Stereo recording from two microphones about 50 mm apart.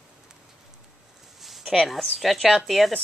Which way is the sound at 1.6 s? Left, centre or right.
Centre.